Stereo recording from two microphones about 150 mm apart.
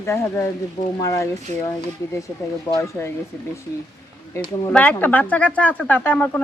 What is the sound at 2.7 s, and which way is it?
Speech, 20° left (ahead or behind).